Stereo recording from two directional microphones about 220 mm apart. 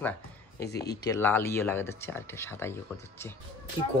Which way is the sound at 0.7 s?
50° left (ahead or behind).